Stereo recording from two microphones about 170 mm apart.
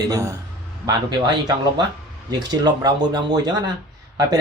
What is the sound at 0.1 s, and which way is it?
A man's voice, 20° right (ahead or behind).